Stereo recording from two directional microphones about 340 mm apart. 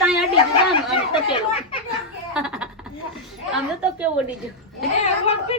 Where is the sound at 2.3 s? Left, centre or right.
Centre.